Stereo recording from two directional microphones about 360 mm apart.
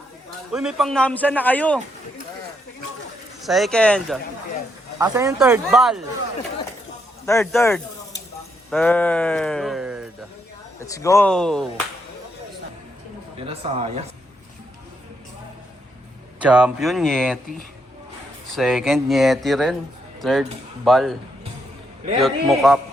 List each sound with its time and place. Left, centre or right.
0.5 s a man's voice: centre
3.4 s a man's voice: centre
4.9 s a man's voice: centre
7.3 s speech: centre
10.8 s a man's voice: centre
13.5 s speech: centre
16.4 s a man's voice: centre
18.5 s a man's voice: centre
22.2 s a man's voice: centre